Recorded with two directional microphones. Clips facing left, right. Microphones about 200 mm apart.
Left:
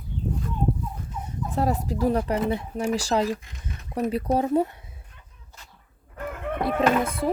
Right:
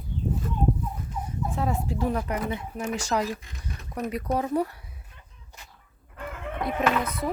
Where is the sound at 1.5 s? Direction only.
40° left (ahead or behind); by 4.8 s 25° left (ahead or behind).